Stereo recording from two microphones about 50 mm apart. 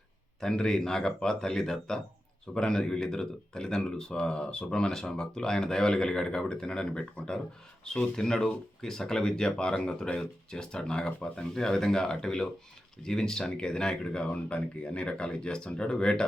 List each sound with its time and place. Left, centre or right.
0.3 s speech: centre